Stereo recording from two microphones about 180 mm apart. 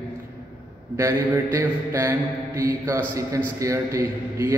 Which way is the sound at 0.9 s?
15° right (ahead or behind).